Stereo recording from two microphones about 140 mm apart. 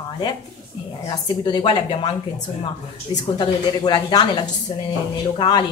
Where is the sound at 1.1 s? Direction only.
30° left (ahead or behind).